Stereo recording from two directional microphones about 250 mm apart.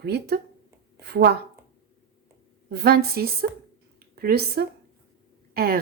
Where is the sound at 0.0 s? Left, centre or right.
Right.